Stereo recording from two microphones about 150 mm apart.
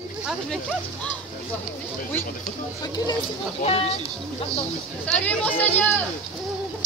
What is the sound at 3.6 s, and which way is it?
Speech, 40° left (ahead or behind).